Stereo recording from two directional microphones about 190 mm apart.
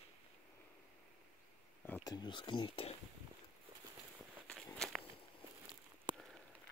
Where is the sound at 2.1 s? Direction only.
25° left (ahead or behind).